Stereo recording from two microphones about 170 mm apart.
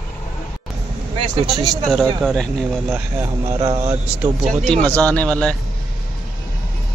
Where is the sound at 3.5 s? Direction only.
20° right (ahead or behind).